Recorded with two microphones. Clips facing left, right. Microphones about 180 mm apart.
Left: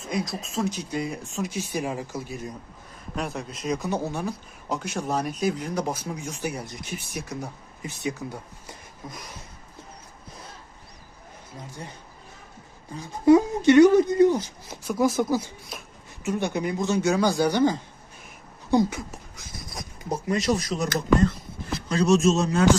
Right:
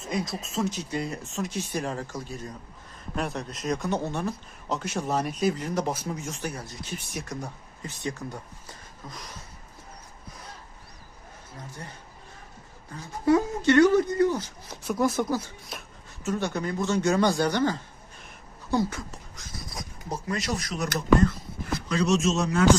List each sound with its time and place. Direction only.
0.1 s speech: centre (ahead or behind)
6.4 s speech: 15° left (ahead or behind)
7.1 s speech: centre (ahead or behind)
12.9 s speech: 15° left (ahead or behind)
14.8 s speech: centre (ahead or behind)
16.2 s speech: 15° left (ahead or behind)
17.0 s speech: centre (ahead or behind)
17.5 s speech: 15° left (ahead or behind)
20.1 s speech: 20° left (ahead or behind)
21.8 s speech: 30° left (ahead or behind)